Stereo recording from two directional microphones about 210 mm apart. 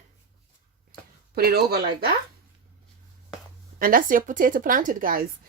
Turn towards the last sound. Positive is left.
turn(degrees=-40)  # may be behind; listen again after turning